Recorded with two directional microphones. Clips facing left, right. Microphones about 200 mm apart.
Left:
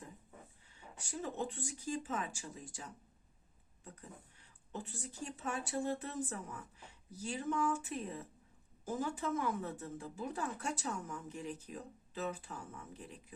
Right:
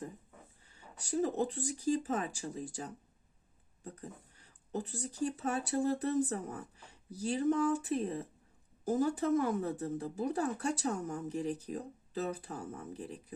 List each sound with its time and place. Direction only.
0.9 s speech: 35° right (ahead or behind)
4.7 s speech: 35° right (ahead or behind)